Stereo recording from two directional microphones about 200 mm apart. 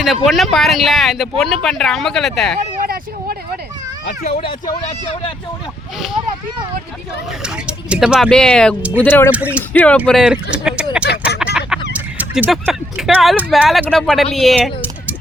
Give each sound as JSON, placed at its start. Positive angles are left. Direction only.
{"t": 0.0, "sound": "speech", "side_deg": 0}
{"t": 2.8, "sound": "vehicle", "side_deg": -50}
{"t": 4.4, "sound": "speech", "side_deg": 20}
{"t": 7.4, "sound": "speech", "side_deg": -5}
{"t": 9.3, "sound": "speech", "side_deg": -5}
{"t": 9.7, "sound": "speech", "side_deg": 5}